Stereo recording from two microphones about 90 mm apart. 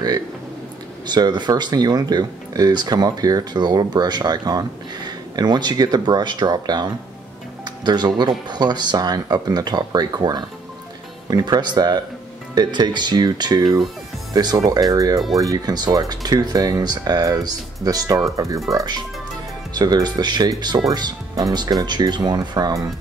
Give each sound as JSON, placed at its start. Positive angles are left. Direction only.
{"t": 1.0, "sound": "speech", "side_deg": -55}